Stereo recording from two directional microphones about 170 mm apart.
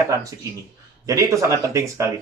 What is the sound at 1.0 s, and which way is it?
Speech, 20° right (ahead or behind).